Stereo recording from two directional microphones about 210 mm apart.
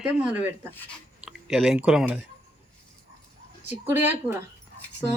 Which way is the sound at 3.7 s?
10° right (ahead or behind).